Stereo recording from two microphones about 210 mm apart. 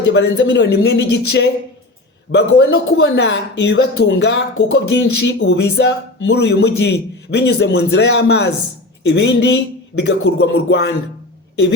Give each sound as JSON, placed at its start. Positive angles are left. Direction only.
{"t": 0.0, "sound": "speech", "side_deg": 55}